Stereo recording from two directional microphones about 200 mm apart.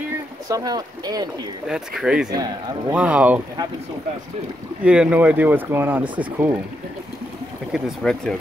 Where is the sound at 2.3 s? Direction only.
20° right (ahead or behind).